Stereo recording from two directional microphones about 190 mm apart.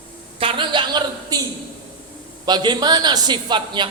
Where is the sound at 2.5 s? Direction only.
20° right (ahead or behind).